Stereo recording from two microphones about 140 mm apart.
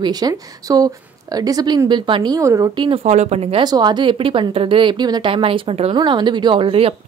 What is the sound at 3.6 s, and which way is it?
Speech, 30° right (ahead or behind).